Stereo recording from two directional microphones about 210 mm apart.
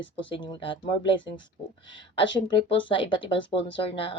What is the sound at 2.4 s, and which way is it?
A woman's voice, 25° left (ahead or behind).